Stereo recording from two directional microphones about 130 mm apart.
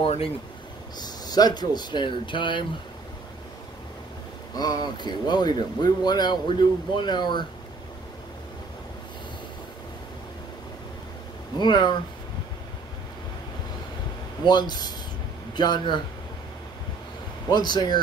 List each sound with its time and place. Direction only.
0.0 s speech: 45° left (ahead or behind)
0.9 s speech: 30° left (ahead or behind)
4.6 s speech: 30° left (ahead or behind)
11.5 s speech: 35° left (ahead or behind)
14.4 s speech: 35° left (ahead or behind)
17.5 s speech: 35° left (ahead or behind)